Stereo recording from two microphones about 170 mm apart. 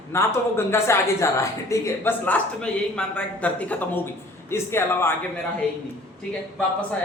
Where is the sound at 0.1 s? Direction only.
15° left (ahead or behind).